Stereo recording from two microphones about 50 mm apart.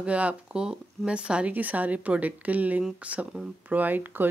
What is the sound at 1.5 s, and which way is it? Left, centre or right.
Speech, right.